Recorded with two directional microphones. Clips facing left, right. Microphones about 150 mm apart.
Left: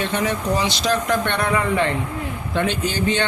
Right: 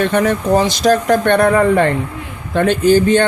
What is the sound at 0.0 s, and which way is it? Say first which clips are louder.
Speech: right 7 dB; 55° right (ahead or behind).